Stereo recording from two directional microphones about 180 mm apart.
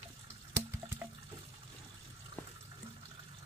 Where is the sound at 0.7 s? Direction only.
15° right (ahead or behind).